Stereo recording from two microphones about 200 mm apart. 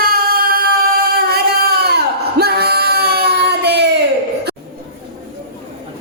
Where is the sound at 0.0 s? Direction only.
45° right (ahead or behind).